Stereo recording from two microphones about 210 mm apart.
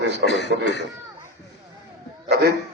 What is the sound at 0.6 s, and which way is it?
Speech, 55° left (ahead or behind).